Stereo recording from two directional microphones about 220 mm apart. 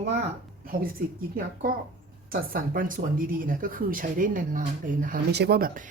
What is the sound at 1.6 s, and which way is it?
Speech, 40° right (ahead or behind).